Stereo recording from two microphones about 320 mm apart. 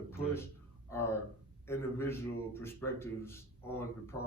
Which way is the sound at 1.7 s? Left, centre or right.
Centre.